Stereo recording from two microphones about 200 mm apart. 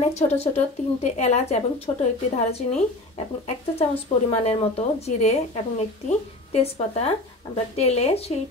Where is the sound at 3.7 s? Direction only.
30° left (ahead or behind).